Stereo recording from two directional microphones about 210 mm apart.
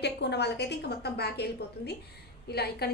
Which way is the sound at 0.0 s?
55° left (ahead or behind).